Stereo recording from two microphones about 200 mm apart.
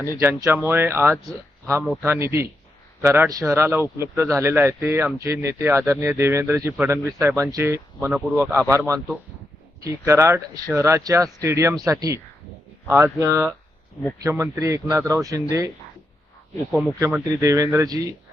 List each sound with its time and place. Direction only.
0.2 s a man's voice: 10° right (ahead or behind)
17.2 s a man's voice: 15° right (ahead or behind)